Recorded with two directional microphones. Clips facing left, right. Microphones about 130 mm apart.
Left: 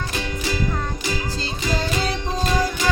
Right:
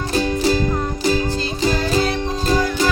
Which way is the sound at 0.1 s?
35° right (ahead or behind).